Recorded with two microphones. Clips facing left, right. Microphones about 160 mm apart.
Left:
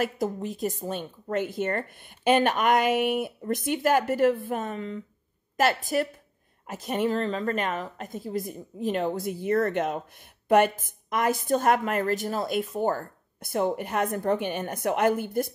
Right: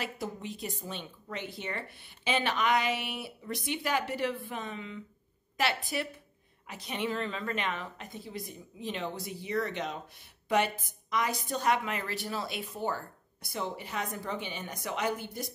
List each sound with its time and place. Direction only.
0.0 s a woman's voice: 45° left (ahead or behind)